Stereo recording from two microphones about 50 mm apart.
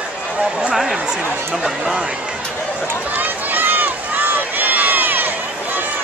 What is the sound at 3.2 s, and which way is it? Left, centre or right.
Run, right.